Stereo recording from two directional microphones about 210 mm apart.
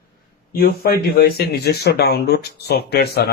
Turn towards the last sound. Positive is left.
turn(degrees=50)  # may be behind; listen again after turning